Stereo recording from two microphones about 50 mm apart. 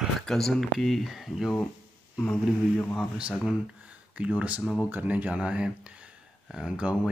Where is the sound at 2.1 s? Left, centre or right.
Left.